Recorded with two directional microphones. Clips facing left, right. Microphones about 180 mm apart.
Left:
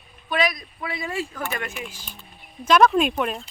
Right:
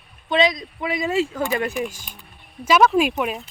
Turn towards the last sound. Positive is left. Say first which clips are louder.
# right 2 dB
turn(degrees=-5)  # may be behind; listen again after turning